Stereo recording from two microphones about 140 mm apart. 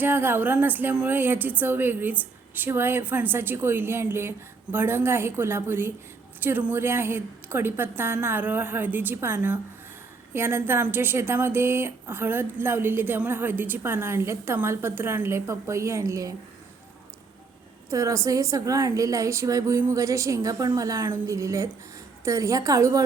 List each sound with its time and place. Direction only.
0.0 s a woman's voice: 15° right (ahead or behind)
17.9 s a woman's voice: 25° right (ahead or behind)